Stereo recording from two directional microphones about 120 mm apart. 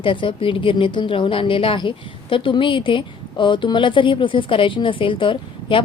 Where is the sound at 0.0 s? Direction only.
45° left (ahead or behind).